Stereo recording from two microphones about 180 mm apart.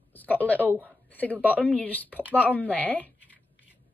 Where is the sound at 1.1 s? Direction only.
10° left (ahead or behind).